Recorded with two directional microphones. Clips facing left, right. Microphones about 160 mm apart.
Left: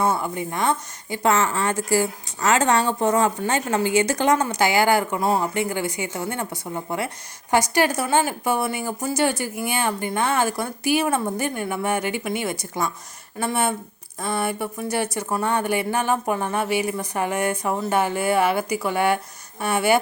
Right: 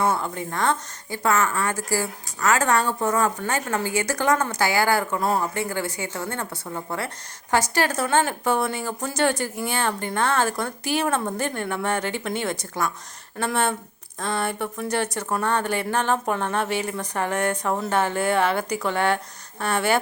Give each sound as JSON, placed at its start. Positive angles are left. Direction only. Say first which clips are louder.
{"t": 0.0, "sound": "speech", "louder": "left 1 dB", "side_deg": 15}
{"t": 1.2, "sound": "a woman's voice", "louder": "left 2 dB", "side_deg": 25}